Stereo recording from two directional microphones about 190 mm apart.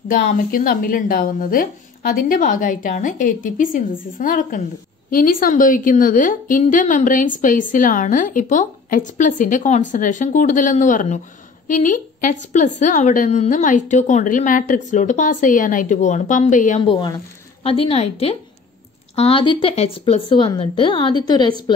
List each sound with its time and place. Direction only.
0.1 s a woman's voice: 50° left (ahead or behind)
16.8 s a woman's voice: 20° left (ahead or behind)